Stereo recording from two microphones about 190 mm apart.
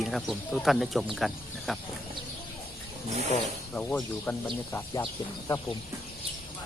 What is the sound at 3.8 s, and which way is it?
Speech, 5° left (ahead or behind).